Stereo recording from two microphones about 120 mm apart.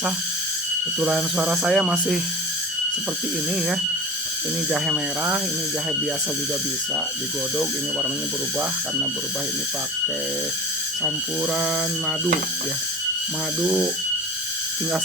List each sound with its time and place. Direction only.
1.1 s speech: 5° right (ahead or behind)
11.5 s speech: centre (ahead or behind)